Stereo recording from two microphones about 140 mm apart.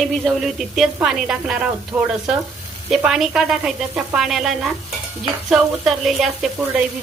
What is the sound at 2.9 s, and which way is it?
Frying, 5° right (ahead or behind).